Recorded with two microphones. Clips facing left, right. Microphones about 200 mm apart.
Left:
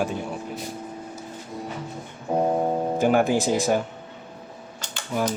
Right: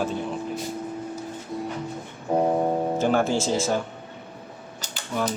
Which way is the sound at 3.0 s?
15° left (ahead or behind).